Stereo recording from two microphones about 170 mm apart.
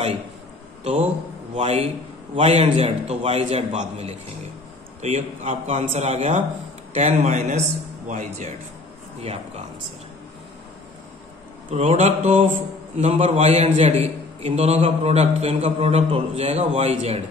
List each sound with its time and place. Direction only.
1.5 s a man's voice: 40° right (ahead or behind)
11.7 s a man's voice: 40° right (ahead or behind)